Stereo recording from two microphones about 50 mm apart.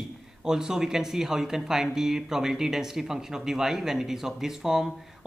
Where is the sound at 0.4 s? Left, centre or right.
Centre.